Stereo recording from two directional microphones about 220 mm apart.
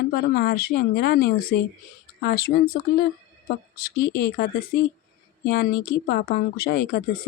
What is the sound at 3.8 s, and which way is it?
Speech, 40° left (ahead or behind).